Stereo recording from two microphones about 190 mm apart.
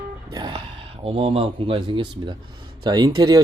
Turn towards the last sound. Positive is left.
turn(degrees=-20)  # may be behind; listen again after turning